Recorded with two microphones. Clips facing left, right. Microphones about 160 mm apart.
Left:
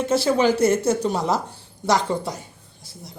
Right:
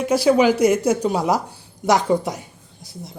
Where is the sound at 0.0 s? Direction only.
10° right (ahead or behind).